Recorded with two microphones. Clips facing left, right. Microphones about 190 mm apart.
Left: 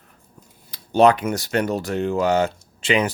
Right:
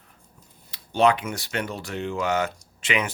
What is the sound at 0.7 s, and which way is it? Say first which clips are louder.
Speech: left 5 dB; 40° left (ahead or behind).